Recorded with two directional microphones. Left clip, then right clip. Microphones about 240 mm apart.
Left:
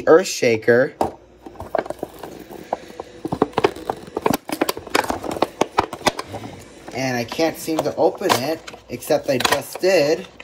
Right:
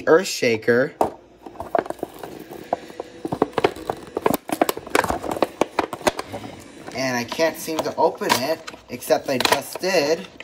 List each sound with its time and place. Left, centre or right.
0.2 s speech: centre
1.7 s a sound: centre
7.0 s speech: centre